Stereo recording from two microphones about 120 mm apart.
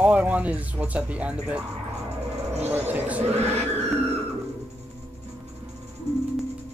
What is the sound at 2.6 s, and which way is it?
Speech, 15° right (ahead or behind).